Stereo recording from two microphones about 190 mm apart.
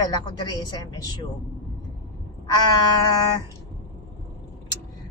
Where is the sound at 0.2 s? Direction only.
20° left (ahead or behind).